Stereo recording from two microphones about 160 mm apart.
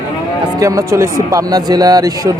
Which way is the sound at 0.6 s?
20° right (ahead or behind).